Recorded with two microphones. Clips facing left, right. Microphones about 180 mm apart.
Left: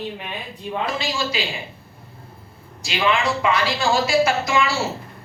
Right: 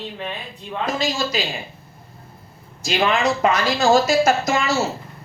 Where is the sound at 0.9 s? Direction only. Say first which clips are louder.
Right 2 dB; 40° right (ahead or behind).